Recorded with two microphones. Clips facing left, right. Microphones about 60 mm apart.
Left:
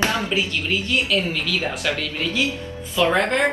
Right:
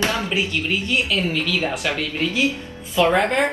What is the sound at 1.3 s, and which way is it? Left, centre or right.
Speech, centre.